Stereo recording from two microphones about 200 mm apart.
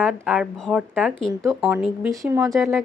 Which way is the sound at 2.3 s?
15° right (ahead or behind).